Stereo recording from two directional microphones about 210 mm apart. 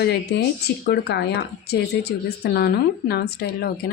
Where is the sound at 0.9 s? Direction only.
50° left (ahead or behind).